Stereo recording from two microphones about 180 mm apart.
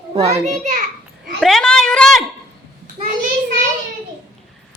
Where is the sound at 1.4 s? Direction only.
Centre (ahead or behind).